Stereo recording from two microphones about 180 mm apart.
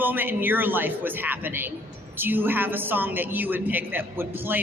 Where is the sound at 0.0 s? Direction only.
10° right (ahead or behind).